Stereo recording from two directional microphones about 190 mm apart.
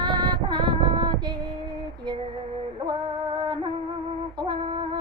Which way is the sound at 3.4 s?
25° right (ahead or behind).